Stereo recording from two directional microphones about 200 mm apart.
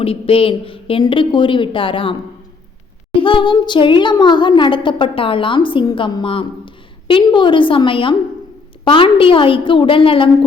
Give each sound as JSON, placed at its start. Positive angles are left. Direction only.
{"t": 0.0, "sound": "speech", "side_deg": 30}
{"t": 3.2, "sound": "speech", "side_deg": 25}